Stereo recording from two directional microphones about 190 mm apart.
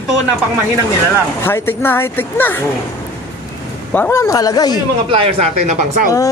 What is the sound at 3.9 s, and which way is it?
Speech, 10° left (ahead or behind).